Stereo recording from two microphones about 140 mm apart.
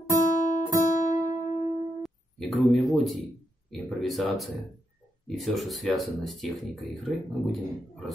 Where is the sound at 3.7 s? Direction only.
Centre (ahead or behind).